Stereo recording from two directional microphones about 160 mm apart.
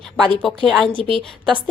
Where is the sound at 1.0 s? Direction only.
30° right (ahead or behind).